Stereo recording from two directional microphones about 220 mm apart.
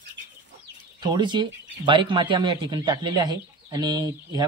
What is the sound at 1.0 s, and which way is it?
Speech, 20° right (ahead or behind).